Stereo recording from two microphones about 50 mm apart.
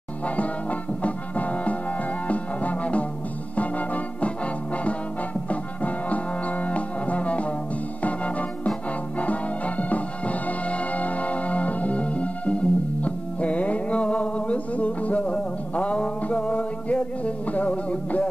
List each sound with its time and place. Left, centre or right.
0.4 s music: left
5.5 s music: left
8.0 s organ: left
9.2 s music: left